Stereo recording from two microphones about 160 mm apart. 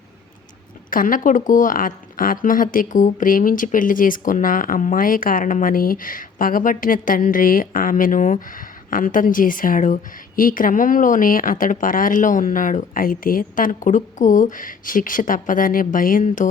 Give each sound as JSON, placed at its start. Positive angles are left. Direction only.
{"t": 0.9, "sound": "a woman's voice", "side_deg": 60}